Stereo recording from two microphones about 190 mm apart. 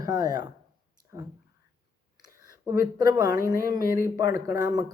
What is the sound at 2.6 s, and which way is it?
Speech, 15° right (ahead or behind).